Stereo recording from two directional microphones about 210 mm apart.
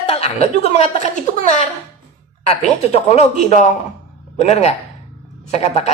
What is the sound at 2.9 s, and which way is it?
A woman's voice, 30° left (ahead or behind).